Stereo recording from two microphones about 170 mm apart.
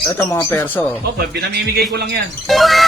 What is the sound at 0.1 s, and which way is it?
Speech, 15° left (ahead or behind).